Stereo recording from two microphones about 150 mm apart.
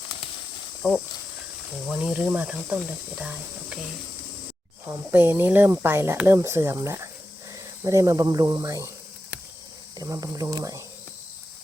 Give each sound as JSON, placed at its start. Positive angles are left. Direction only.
{"t": 0.8, "sound": "speech", "side_deg": 5}
{"t": 1.9, "sound": "speech", "side_deg": -5}
{"t": 4.9, "sound": "speech", "side_deg": -15}
{"t": 10.0, "sound": "speech", "side_deg": -25}